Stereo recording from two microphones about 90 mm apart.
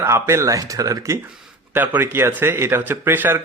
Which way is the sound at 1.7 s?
25° right (ahead or behind).